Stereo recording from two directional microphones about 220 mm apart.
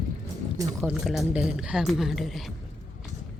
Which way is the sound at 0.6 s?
15° right (ahead or behind).